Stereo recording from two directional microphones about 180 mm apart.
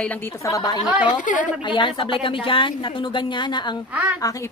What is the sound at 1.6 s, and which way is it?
A woman's voice, 25° left (ahead or behind).